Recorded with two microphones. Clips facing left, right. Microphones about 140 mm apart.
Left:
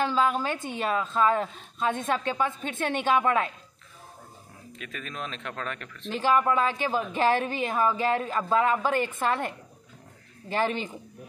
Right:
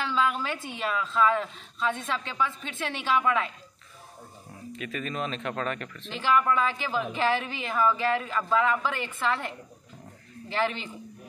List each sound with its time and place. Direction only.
0.0 s a woman's voice: 40° left (ahead or behind)
4.7 s speech: centre (ahead or behind)
6.0 s a woman's voice: 40° left (ahead or behind)
10.5 s a woman's voice: 45° left (ahead or behind)